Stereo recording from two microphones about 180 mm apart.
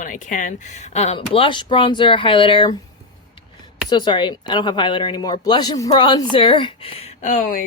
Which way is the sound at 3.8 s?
25° left (ahead or behind).